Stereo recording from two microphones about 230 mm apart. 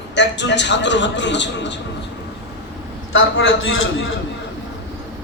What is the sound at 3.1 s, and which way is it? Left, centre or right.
Speech, left.